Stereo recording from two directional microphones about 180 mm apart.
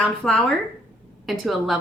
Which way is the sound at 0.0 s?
5° left (ahead or behind).